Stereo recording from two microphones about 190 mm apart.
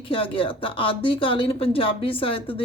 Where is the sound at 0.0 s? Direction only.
25° left (ahead or behind).